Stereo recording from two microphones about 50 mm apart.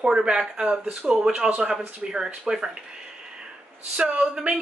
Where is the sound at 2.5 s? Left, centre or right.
Centre.